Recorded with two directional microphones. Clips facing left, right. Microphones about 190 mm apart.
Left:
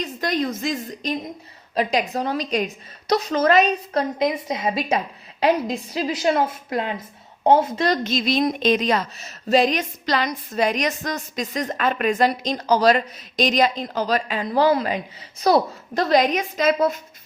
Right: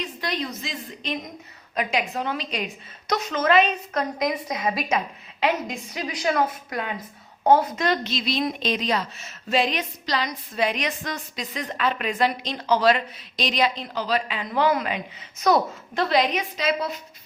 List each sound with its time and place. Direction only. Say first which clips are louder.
0.0 s a woman's voice: left 6 dB; 45° left (ahead or behind)
4.2 s a woman's voice: left 3 dB; 25° left (ahead or behind)
7.9 s a woman's voice: left 4 dB; 45° left (ahead or behind)